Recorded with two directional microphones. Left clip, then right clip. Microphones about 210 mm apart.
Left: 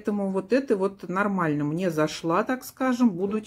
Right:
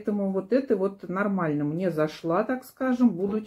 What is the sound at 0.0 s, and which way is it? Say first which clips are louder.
Speech: even; 30° left (ahead or behind).